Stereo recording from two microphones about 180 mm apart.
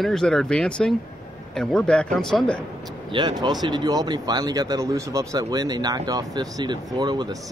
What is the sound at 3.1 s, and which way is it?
Speech, 25° right (ahead or behind).